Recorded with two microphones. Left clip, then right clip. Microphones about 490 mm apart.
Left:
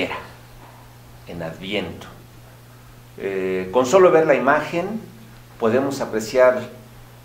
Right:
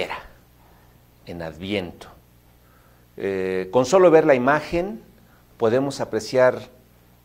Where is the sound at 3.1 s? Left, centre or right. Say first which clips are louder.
Left 1 dB; right.